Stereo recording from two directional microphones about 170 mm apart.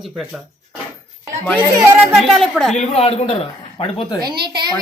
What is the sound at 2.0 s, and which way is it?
Speech, 5° right (ahead or behind).